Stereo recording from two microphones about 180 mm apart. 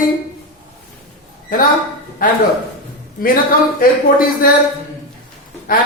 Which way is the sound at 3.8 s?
55° left (ahead or behind).